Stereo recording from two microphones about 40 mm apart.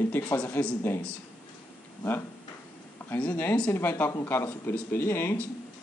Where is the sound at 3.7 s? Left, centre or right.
Left.